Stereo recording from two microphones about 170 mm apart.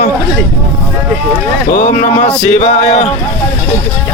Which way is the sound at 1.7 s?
50° left (ahead or behind).